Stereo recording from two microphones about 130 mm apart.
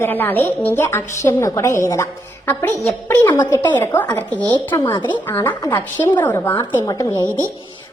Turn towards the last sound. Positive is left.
turn(degrees=25)  # may be behind; listen again after turning